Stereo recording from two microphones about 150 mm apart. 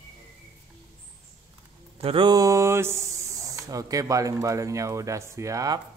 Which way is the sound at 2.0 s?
35° right (ahead or behind).